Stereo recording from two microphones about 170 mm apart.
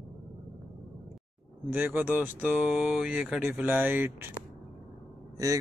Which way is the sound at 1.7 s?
10° right (ahead or behind).